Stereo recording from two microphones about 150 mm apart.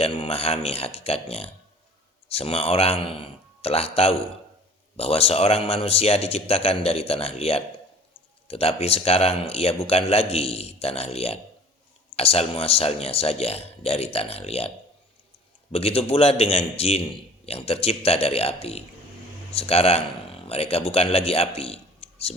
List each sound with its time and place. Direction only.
0.0 s a man's voice: 40° left (ahead or behind)
15.7 s a man's voice: 40° left (ahead or behind)